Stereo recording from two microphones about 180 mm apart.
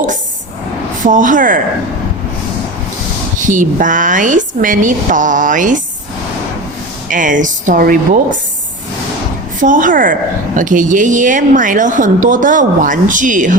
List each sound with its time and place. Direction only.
1.0 s a woman's voice: 45° right (ahead or behind)
3.3 s a woman's voice: 45° right (ahead or behind)
7.1 s a woman's voice: 45° right (ahead or behind)
9.6 s a woman's voice: 45° right (ahead or behind)